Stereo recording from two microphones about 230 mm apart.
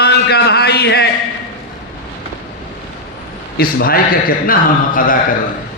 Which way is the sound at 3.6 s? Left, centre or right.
Left.